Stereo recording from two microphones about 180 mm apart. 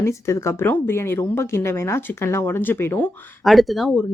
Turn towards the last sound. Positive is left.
turn(degrees=0)  # may be behind; listen again after turning